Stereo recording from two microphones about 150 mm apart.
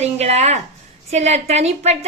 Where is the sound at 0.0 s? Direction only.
45° right (ahead or behind).